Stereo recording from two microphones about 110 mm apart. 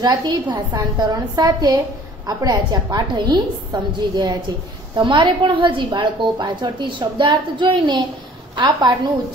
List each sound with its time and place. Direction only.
0.0 s a woman's voice: 40° right (ahead or behind)